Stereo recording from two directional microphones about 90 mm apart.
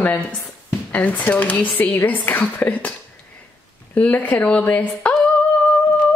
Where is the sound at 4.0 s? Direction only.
20° left (ahead or behind).